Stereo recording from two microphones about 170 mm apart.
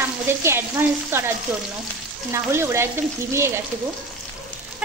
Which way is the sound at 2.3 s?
15° right (ahead or behind).